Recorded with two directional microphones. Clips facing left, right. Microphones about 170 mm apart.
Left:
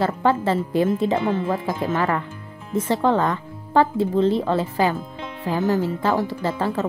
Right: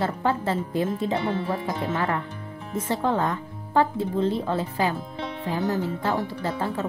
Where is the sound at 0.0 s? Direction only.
90° left.